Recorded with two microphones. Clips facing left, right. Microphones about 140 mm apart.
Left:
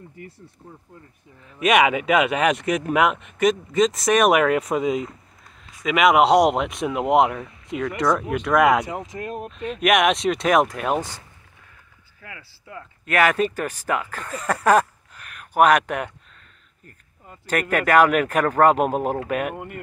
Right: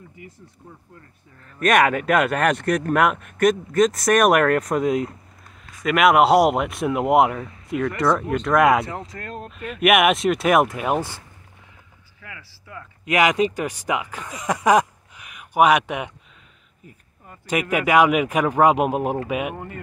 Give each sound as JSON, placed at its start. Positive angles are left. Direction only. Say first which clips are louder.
{"t": 0.2, "sound": "speech", "louder": "left 3 dB", "side_deg": -15}
{"t": 1.6, "sound": "speech", "louder": "even", "side_deg": 5}
{"t": 8.8, "sound": "speech", "louder": "left 2 dB", "side_deg": 15}
{"t": 9.5, "sound": "speech", "louder": "right 2 dB", "side_deg": -5}
{"t": 12.2, "sound": "speech", "louder": "even", "side_deg": 25}
{"t": 13.0, "sound": "speech", "louder": "right 1 dB", "side_deg": -15}
{"t": 17.5, "sound": "speech", "louder": "even", "side_deg": -10}
{"t": 19.5, "sound": "speech", "louder": "even", "side_deg": 15}